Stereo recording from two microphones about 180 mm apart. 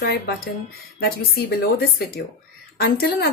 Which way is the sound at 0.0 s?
65° left (ahead or behind).